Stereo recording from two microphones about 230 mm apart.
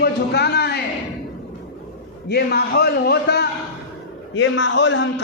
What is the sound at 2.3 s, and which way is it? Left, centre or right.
Speech, left.